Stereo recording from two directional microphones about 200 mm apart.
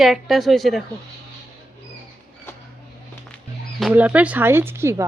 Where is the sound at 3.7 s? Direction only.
5° right (ahead or behind).